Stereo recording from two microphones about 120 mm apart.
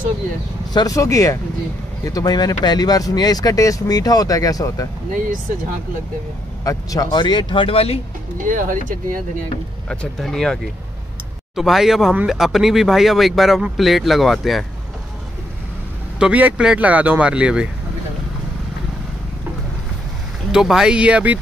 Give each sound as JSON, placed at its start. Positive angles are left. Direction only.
{"t": 0.7, "sound": "speech", "side_deg": 30}
{"t": 6.6, "sound": "speech", "side_deg": 30}
{"t": 8.5, "sound": "speech", "side_deg": -90}
{"t": 9.8, "sound": "speech", "side_deg": 5}
{"t": 16.2, "sound": "speech", "side_deg": -10}
{"t": 20.5, "sound": "speech", "side_deg": -5}